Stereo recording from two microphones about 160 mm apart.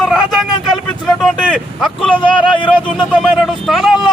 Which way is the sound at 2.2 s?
30° left (ahead or behind).